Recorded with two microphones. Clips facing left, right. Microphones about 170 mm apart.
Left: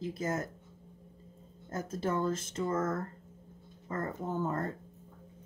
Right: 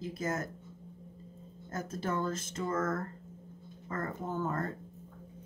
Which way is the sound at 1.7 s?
30° left (ahead or behind).